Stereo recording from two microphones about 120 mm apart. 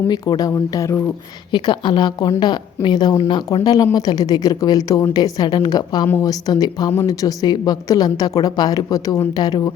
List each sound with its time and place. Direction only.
0.1 s a woman's voice: 35° left (ahead or behind)
1.5 s a woman's voice: 40° left (ahead or behind)